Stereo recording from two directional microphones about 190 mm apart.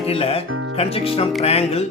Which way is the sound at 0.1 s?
30° left (ahead or behind).